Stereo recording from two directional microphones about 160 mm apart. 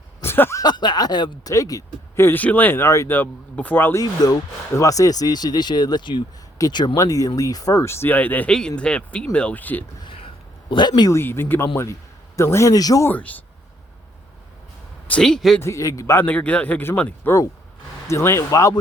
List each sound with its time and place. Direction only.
0.2 s speech: 15° left (ahead or behind)
4.0 s speech: 25° left (ahead or behind)
10.7 s speech: 30° left (ahead or behind); by 13.4 s 10° left (ahead or behind)
15.0 s speech: 5° left (ahead or behind)
15.6 s speech: 20° left (ahead or behind)